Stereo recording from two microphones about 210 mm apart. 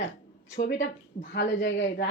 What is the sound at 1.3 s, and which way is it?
Speech, 55° left (ahead or behind).